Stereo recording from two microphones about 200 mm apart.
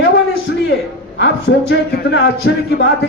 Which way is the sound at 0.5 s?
55° left (ahead or behind).